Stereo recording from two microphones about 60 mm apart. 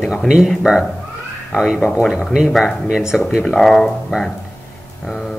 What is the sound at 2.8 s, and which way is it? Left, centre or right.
Speech, centre.